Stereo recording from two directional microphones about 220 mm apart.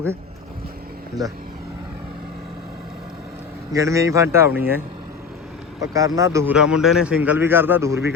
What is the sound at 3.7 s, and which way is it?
A man's voice, 15° right (ahead or behind).